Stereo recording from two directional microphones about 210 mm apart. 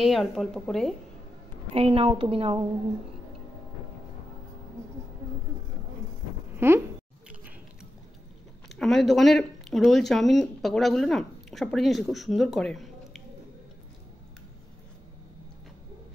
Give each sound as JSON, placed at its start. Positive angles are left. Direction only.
{"t": 0.0, "sound": "speech", "side_deg": 0}
{"t": 1.7, "sound": "a woman's voice", "side_deg": -30}
{"t": 6.5, "sound": "a sound", "side_deg": -10}
{"t": 8.6, "sound": "speech", "side_deg": 0}